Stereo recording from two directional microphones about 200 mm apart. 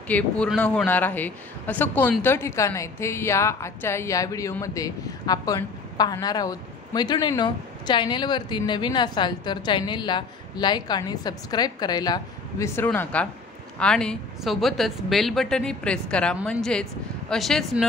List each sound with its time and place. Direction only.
0.1 s a man's voice: 5° left (ahead or behind)